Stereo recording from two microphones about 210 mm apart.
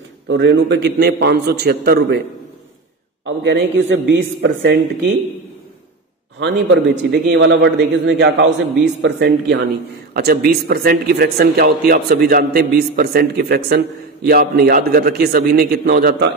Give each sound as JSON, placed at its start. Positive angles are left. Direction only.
{"t": 0.3, "sound": "speech", "side_deg": -55}
{"t": 3.4, "sound": "a man's voice", "side_deg": -60}
{"t": 6.4, "sound": "a man's voice", "side_deg": -55}